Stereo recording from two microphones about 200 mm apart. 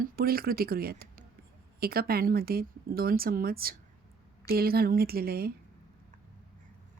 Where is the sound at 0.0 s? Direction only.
45° right (ahead or behind).